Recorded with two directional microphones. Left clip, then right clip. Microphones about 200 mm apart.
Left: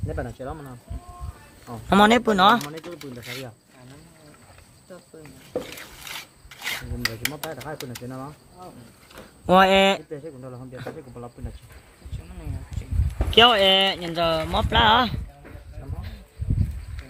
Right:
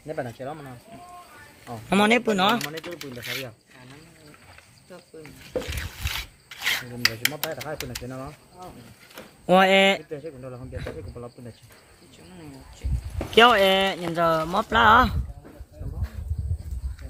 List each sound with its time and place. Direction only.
0.1 s speech: 40° left (ahead or behind)
1.6 s speech: 20° left (ahead or behind); by 3.4 s 5° left (ahead or behind)
5.2 s a sound: 10° left (ahead or behind)
8.0 s speech: 35° left (ahead or behind)
9.1 s speech: 10° left (ahead or behind)
10.1 s speech: 35° left (ahead or behind)
13.1 s speech: 5° right (ahead or behind)